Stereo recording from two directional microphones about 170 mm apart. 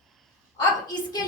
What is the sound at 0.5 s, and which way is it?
Speech, 25° left (ahead or behind).